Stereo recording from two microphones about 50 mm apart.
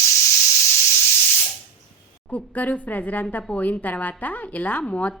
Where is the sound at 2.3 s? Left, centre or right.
Left.